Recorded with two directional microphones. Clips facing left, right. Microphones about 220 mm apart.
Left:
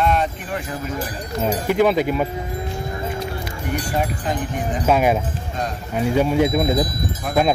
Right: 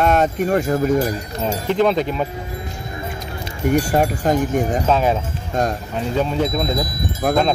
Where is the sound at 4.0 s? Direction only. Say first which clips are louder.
Right 6 dB; 45° right (ahead or behind).